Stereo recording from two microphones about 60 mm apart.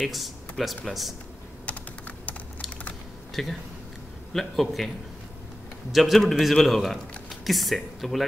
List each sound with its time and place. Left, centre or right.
0.0 s a man's voice: centre
1.7 s typing: left
3.4 s a man's voice: centre